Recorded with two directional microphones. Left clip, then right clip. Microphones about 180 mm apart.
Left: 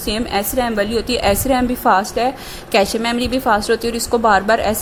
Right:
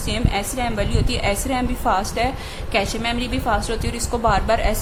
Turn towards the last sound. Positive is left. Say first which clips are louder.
# left 5 dB
turn(degrees=35)  # may be behind; listen again after turning